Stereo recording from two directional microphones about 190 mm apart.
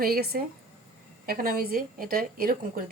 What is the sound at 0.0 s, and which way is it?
A woman's voice, 50° right (ahead or behind).